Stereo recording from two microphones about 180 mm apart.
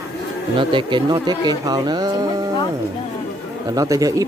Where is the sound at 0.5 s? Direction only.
25° right (ahead or behind).